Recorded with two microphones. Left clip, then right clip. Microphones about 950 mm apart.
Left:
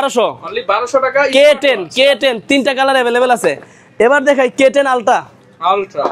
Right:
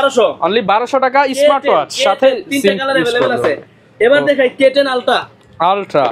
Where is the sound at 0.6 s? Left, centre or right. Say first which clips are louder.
Left 4 dB; right.